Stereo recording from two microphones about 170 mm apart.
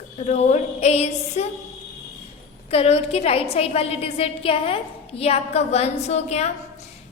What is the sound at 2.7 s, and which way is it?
A woman's voice, 35° left (ahead or behind).